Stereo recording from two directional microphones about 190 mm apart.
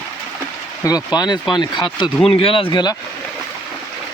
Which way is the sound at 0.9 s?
20° left (ahead or behind).